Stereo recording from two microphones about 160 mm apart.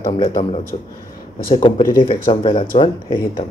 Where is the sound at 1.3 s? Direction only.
60° left (ahead or behind).